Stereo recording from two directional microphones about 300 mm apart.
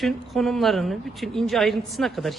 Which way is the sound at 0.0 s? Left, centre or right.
Centre.